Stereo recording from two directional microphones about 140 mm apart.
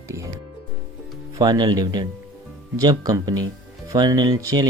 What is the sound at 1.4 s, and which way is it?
Speech, 30° right (ahead or behind).